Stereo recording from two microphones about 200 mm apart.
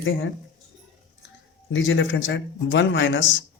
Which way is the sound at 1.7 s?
75° left (ahead or behind).